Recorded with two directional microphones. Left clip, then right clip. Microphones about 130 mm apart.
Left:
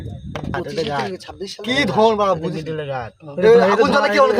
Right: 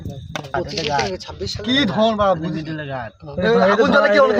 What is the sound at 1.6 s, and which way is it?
Speech, 90° left.